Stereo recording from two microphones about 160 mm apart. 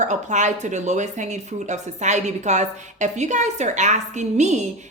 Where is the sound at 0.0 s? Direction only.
50° right (ahead or behind).